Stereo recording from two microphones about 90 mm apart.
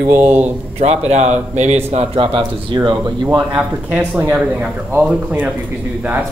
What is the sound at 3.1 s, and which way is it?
Speech, 50° right (ahead or behind).